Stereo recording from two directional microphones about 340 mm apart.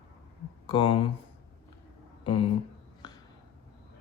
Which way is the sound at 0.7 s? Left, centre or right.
Centre.